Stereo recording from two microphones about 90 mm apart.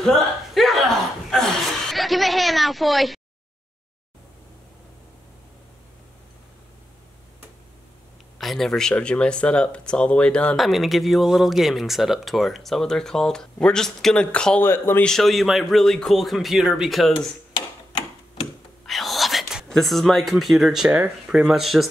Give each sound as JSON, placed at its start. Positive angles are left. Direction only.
{"t": 0.0, "sound": "chuckle", "side_deg": 0}
{"t": 8.4, "sound": "speech", "side_deg": 5}
{"t": 10.6, "sound": "speech", "side_deg": 0}
{"t": 14.6, "sound": "speech", "side_deg": 25}
{"t": 15.0, "sound": "speech", "side_deg": 5}
{"t": 18.9, "sound": "whispering", "side_deg": 0}
{"t": 21.3, "sound": "speech", "side_deg": -5}